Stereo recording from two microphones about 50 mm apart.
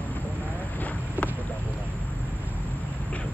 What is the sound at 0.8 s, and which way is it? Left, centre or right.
Boat, left.